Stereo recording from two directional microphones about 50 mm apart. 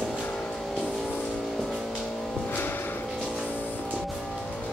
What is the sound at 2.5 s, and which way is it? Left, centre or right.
Music, left.